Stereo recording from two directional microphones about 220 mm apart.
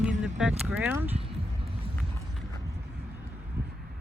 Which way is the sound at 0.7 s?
10° right (ahead or behind).